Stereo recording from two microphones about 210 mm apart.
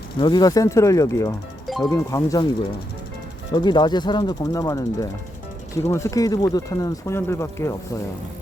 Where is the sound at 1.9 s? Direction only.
15° left (ahead or behind).